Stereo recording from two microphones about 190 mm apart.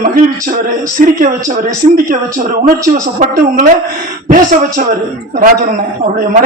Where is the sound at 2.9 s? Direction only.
40° right (ahead or behind).